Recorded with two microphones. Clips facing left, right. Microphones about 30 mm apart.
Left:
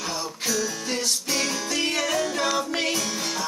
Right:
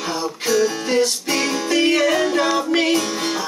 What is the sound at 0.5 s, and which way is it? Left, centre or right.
Music, right.